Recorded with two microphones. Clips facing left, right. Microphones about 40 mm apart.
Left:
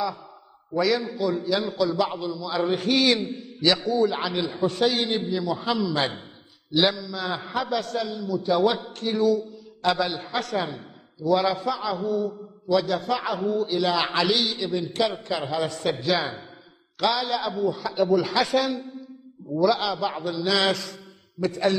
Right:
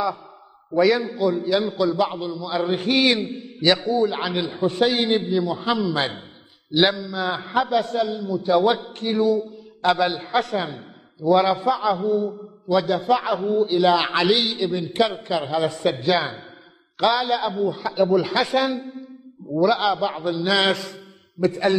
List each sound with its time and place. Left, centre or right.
0.7 s a man's voice: right
1.1 s a man's voice: centre
2.1 s a man's voice: centre
3.4 s a sound: right
3.9 s a man's voice: centre
14.6 s a man's voice: centre
14.9 s a man's voice: right
15.3 s a man's voice: centre
15.6 s a man's voice: centre
20.1 s a man's voice: centre
20.3 s a man's voice: right